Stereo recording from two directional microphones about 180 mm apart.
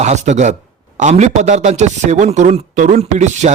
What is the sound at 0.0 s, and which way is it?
Speech, 40° right (ahead or behind).